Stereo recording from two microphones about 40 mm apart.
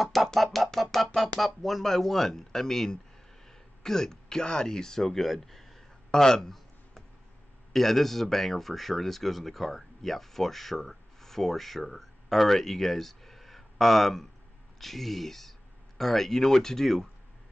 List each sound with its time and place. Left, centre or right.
0.0 s speech: centre
6.2 s speech: centre
7.7 s speech: centre